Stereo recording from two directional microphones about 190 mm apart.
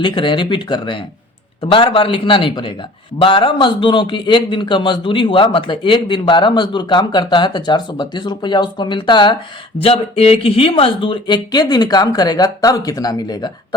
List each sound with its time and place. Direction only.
0.0 s a man's voice: 25° left (ahead or behind)